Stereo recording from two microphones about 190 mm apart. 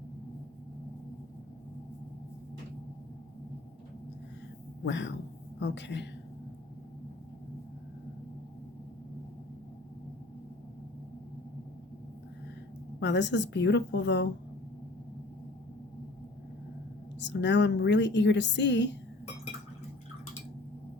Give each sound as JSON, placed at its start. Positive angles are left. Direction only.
{"t": 4.8, "sound": "a man's voice", "side_deg": 70}
{"t": 13.0, "sound": "a woman's voice", "side_deg": 65}
{"t": 17.2, "sound": "a woman's voice", "side_deg": 65}